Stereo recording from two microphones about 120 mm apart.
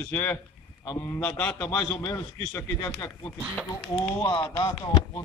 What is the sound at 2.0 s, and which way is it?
A man's voice, 25° left (ahead or behind).